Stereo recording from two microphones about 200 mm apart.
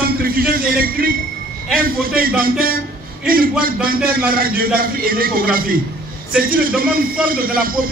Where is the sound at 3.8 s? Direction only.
45° right (ahead or behind).